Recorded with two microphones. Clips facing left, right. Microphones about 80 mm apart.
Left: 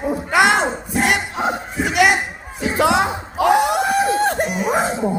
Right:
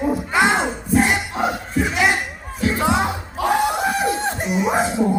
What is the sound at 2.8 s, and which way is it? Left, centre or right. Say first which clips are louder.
Music: left 5 dB; left.